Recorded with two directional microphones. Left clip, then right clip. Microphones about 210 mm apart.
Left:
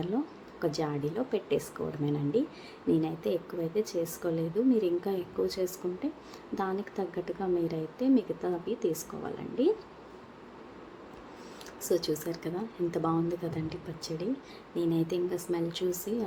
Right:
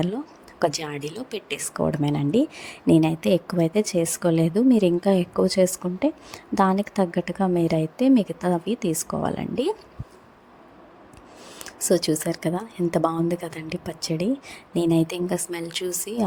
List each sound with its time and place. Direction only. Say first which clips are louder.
0.6 s speech: right 7 dB; 45° right (ahead or behind)
11.9 s speech: right 8 dB; 45° right (ahead or behind)